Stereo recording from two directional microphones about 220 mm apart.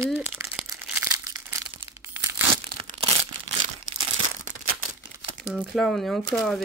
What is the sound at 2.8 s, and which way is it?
Crumpling, 25° right (ahead or behind).